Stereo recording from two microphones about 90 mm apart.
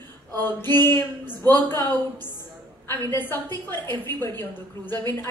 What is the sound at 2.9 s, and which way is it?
A woman's voice, 25° left (ahead or behind).